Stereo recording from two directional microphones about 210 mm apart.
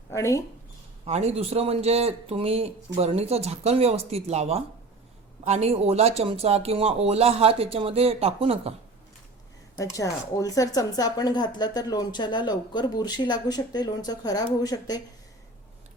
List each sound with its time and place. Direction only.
0.1 s speech: 15° left (ahead or behind)
1.0 s a man's voice: 30° right (ahead or behind)
9.7 s a woman's voice: 15° left (ahead or behind)